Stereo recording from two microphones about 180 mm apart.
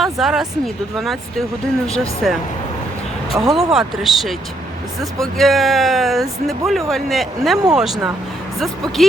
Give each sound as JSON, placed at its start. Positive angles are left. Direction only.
{"t": 0.0, "sound": "speech", "side_deg": 0}